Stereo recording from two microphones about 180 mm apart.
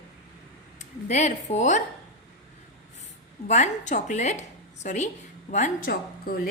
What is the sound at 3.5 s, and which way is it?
A woman's voice, 40° left (ahead or behind).